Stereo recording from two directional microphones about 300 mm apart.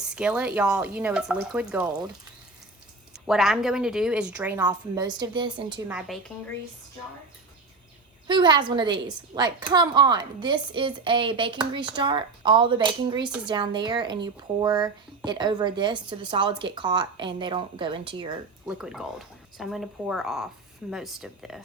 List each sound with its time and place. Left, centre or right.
0.0 s a woman's voice: centre
3.2 s a woman's voice: centre
5.9 s a woman's voice: centre
8.3 s a woman's voice: centre
18.7 s a woman's voice: centre